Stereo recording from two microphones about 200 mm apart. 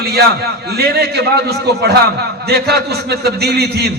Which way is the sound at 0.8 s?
55° right (ahead or behind).